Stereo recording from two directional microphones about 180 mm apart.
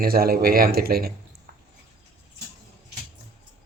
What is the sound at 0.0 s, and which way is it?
Speech, 55° right (ahead or behind).